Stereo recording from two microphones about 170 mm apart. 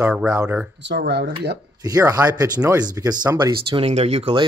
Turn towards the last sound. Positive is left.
turn(degrees=-40)  # may be behind; listen again after turning